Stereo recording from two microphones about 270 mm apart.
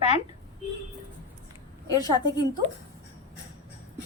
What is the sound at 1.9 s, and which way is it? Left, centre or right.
Speech, centre.